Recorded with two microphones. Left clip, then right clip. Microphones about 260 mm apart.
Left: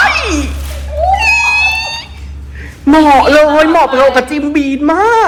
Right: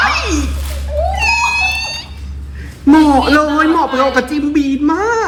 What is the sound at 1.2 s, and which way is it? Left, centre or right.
Cat, centre.